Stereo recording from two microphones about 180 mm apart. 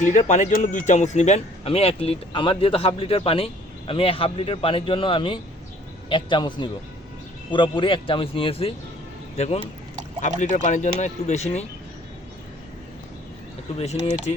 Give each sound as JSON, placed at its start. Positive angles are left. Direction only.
{"t": 0.0, "sound": "speech", "side_deg": 40}
{"t": 13.7, "sound": "speech", "side_deg": 35}